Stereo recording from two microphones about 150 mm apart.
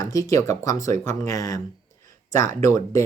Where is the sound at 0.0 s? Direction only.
25° left (ahead or behind).